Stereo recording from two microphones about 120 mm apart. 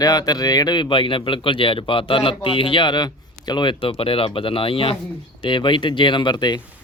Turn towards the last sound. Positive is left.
turn(degrees=40)  # may be behind; listen again after turning